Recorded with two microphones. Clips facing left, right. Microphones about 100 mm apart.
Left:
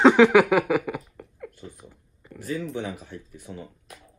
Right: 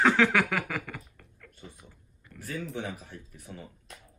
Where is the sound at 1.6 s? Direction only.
25° left (ahead or behind).